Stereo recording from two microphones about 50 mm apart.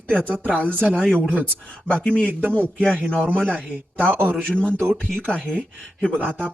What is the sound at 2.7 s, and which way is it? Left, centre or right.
Speech, centre.